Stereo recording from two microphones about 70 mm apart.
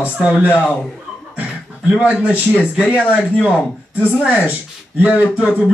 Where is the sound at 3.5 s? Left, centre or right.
Left.